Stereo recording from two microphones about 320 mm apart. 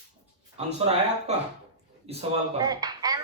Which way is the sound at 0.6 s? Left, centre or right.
Centre.